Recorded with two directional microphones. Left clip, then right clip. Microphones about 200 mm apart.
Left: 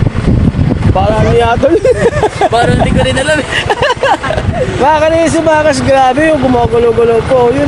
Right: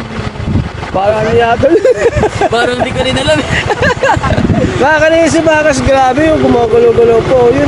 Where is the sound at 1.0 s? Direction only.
20° left (ahead or behind).